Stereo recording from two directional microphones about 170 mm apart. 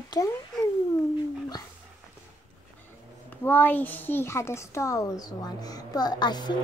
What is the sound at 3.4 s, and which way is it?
A child's voice, 10° left (ahead or behind).